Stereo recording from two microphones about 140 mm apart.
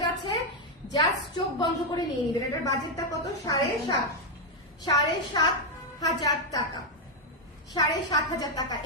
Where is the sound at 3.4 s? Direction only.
30° left (ahead or behind).